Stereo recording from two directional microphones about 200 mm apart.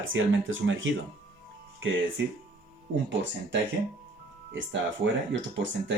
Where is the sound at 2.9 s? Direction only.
65° right (ahead or behind).